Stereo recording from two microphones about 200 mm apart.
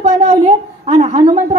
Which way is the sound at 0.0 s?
30° right (ahead or behind).